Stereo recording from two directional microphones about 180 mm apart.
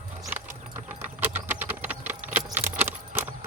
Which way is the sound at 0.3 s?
10° right (ahead or behind).